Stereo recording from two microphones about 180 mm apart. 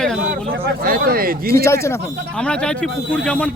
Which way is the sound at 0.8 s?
55° right (ahead or behind).